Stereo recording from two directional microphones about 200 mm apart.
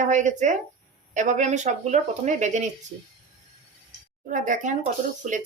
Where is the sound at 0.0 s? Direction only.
35° right (ahead or behind).